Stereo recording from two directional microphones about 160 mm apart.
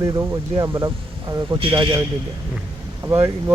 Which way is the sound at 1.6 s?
30° right (ahead or behind).